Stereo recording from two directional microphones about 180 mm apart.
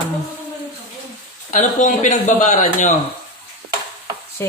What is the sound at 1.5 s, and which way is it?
Speech, 45° left (ahead or behind).